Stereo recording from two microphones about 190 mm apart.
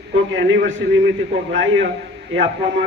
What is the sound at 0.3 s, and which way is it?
Speech, 75° right (ahead or behind).